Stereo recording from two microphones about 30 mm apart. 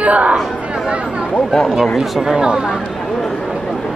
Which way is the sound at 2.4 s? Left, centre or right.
Right.